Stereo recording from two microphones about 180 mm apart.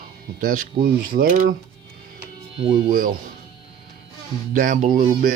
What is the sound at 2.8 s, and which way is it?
Speech, 50° right (ahead or behind).